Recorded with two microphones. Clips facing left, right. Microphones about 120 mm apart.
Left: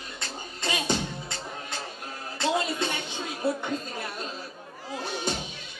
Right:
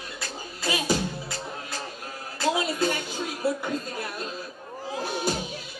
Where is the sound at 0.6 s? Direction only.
5° right (ahead or behind).